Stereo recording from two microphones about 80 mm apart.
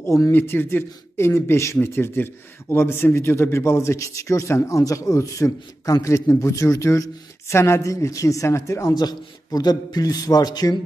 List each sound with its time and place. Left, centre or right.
0.0 s speech: left
0.3 s a man's voice: left
8.9 s a man's voice: left